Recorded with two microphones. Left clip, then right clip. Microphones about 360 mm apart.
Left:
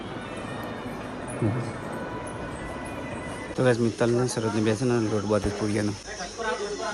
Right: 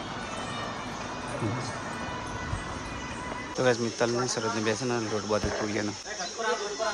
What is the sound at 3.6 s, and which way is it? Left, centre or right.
Speech, centre.